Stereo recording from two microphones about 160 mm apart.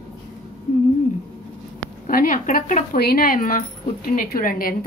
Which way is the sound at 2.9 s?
70° left (ahead or behind).